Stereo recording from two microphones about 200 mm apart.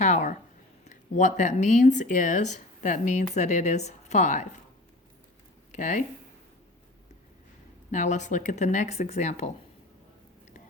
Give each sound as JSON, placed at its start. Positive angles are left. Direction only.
{"t": 0.0, "sound": "a sound", "side_deg": 35}
{"t": 0.9, "sound": "speech", "side_deg": 40}
{"t": 5.7, "sound": "speech", "side_deg": 40}
{"t": 7.9, "sound": "speech", "side_deg": 35}